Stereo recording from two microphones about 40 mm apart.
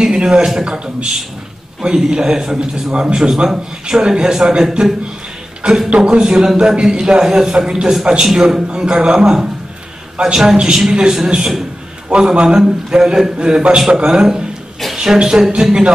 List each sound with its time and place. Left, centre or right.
0.0 s a man's voice: centre
1.8 s a man's voice: centre
13.4 s a man's voice: right